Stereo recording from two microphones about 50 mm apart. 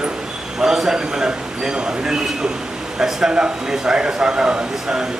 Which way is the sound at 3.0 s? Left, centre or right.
Centre.